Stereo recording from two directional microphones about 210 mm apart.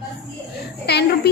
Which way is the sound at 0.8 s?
50° left (ahead or behind).